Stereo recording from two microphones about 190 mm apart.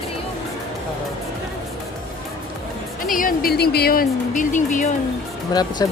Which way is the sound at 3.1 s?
50° left (ahead or behind).